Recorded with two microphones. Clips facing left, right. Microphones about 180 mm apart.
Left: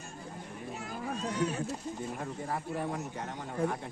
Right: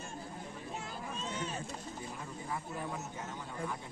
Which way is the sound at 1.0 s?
70° left (ahead or behind).